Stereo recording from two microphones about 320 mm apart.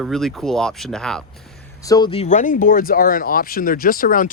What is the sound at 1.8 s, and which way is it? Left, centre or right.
Speech, centre.